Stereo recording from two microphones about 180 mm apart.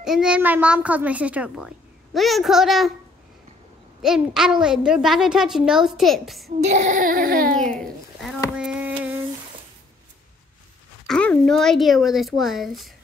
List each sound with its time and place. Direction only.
0.0 s a child's voice: 5° right (ahead or behind)
4.0 s a woman's voice: 5° right (ahead or behind)
6.6 s baby cry: 40° right (ahead or behind)
7.5 s speech: 5° left (ahead or behind)
8.5 s a sound: 5° right (ahead or behind)
11.1 s a woman's voice: 5° left (ahead or behind)